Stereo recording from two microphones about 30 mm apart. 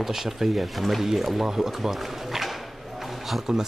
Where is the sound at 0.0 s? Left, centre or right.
Centre.